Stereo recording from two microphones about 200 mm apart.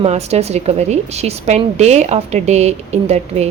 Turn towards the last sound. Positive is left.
turn(degrees=-30)  # may be behind; listen again after turning